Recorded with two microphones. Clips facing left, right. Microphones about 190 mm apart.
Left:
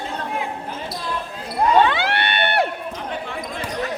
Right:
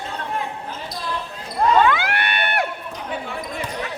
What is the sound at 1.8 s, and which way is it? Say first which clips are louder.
Crowd: even; 30° left (ahead or behind).